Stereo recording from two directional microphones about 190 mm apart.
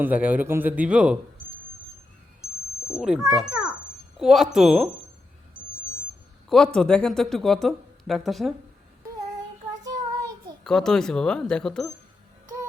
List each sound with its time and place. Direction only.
0.0 s a man's voice: 10° right (ahead or behind)
2.9 s speech: 5° right (ahead or behind)
6.7 s speech: 5° left (ahead or behind)
9.8 s child singing: 20° right (ahead or behind)
10.6 s speech: 5° left (ahead or behind)